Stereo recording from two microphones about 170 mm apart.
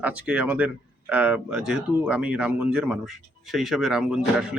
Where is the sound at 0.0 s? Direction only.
10° right (ahead or behind).